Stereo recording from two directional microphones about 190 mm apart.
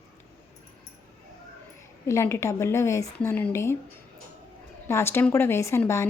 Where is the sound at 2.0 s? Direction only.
15° left (ahead or behind).